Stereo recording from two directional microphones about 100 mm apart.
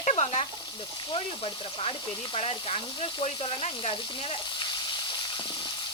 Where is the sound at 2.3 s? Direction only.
80° left.